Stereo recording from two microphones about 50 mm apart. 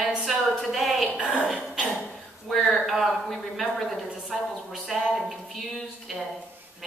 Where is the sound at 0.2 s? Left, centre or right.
Centre.